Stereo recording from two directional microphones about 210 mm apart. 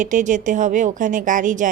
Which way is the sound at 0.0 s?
35° right (ahead or behind).